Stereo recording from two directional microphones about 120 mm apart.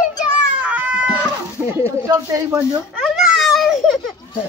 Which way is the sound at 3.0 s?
5° right (ahead or behind).